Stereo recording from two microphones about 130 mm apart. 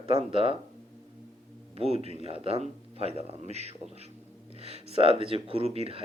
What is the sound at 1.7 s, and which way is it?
A man's voice, 50° right (ahead or behind).